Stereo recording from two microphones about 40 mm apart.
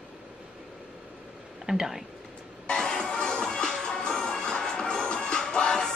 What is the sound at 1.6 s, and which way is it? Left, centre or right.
Speech, centre.